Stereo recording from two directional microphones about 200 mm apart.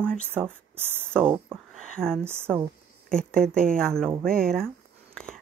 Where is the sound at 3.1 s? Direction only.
5° left (ahead or behind).